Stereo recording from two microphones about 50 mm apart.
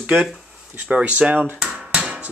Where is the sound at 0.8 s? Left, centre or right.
Right.